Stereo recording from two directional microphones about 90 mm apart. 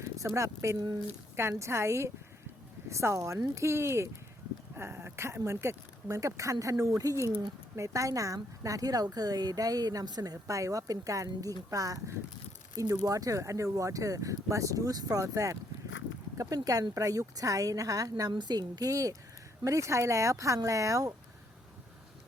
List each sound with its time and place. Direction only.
0.0 s a woman's voice: 35° right (ahead or behind)
10.4 s a woman's voice: 35° right (ahead or behind)
18.3 s a woman's voice: 55° right (ahead or behind); by 21.1 s 40° right (ahead or behind)